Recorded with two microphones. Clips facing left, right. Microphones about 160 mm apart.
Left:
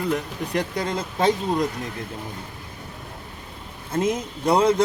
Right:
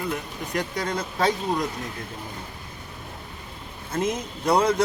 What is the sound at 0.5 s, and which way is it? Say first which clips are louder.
Speech: left 2 dB; 25° left (ahead or behind).